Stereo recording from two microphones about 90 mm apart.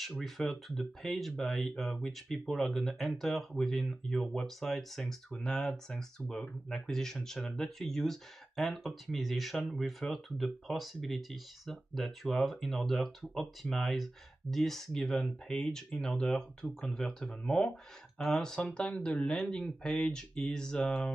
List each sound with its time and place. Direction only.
0.0 s speech: centre (ahead or behind)